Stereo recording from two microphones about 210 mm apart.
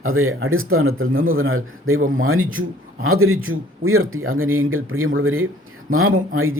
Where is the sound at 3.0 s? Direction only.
85° right.